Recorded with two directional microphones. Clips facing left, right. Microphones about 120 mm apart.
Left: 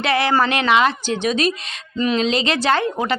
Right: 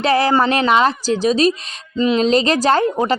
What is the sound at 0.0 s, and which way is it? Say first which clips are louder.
A woman's voice: right 3 dB; 40° right (ahead or behind).